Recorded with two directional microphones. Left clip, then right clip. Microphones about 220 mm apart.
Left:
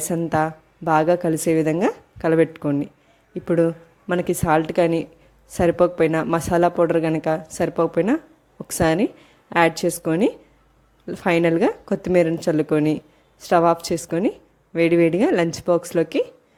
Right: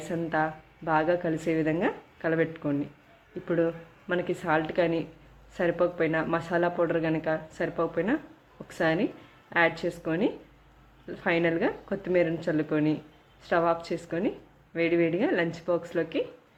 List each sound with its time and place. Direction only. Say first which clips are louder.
0.1 s speech: left 7 dB; 50° left (ahead or behind)